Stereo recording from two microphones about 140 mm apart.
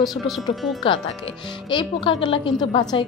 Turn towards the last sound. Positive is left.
turn(degrees=35)  # may be behind; listen again after turning